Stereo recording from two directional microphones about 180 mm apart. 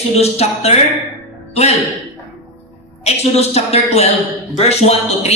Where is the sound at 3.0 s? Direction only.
35° left (ahead or behind).